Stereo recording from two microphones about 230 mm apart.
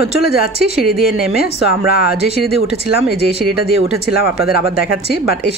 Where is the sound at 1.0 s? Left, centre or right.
Left.